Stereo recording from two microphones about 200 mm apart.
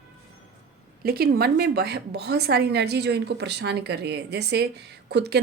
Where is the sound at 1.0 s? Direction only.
50° right (ahead or behind).